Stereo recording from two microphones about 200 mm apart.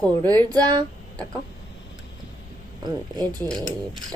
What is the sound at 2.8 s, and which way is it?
Speech, 20° right (ahead or behind).